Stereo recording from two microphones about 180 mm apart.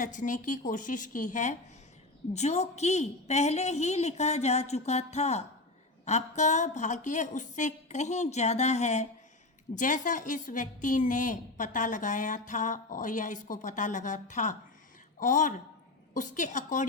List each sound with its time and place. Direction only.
0.0 s a woman's voice: 45° left (ahead or behind)